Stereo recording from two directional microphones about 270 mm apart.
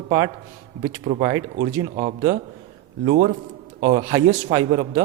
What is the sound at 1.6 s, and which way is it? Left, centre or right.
A man's voice, right.